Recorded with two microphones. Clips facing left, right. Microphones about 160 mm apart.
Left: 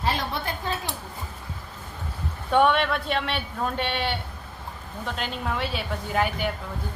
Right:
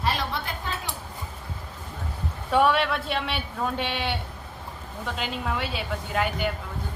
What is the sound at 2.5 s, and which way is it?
A man's voice, 5° right (ahead or behind).